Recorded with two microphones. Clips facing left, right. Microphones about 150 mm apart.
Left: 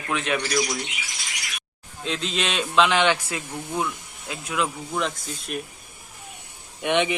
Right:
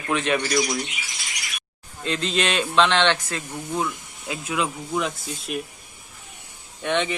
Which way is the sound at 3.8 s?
5° right (ahead or behind).